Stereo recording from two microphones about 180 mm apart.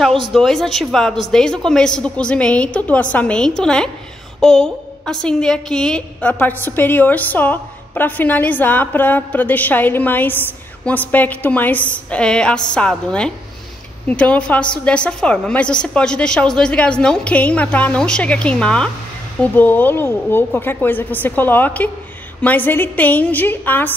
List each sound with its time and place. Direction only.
0.3 s a woman's voice: centre (ahead or behind)